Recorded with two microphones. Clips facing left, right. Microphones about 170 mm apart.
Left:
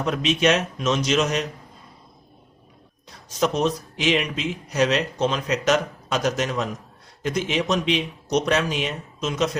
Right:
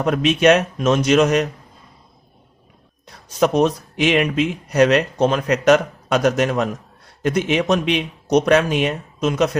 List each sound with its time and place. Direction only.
0.0 s speech: 55° right (ahead or behind)
3.4 s speech: 55° right (ahead or behind)